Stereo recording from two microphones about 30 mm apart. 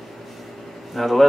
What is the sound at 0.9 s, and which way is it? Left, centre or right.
Speech, centre.